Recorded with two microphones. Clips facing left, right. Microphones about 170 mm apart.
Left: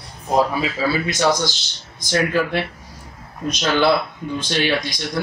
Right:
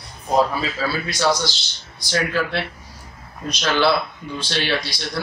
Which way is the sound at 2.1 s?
15° left (ahead or behind).